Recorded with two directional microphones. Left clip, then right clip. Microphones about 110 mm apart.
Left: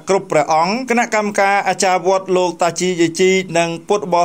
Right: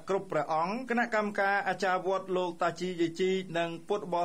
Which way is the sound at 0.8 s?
40° left (ahead or behind).